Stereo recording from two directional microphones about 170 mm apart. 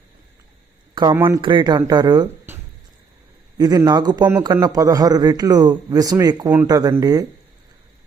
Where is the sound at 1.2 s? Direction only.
30° right (ahead or behind).